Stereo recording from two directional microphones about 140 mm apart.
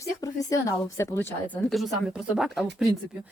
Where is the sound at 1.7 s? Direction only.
Centre (ahead or behind).